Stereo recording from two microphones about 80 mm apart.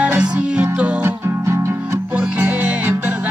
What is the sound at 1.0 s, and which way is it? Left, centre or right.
Music, right.